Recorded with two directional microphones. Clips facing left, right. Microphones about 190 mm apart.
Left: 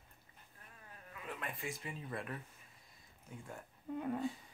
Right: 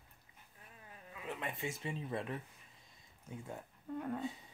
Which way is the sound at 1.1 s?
25° right (ahead or behind).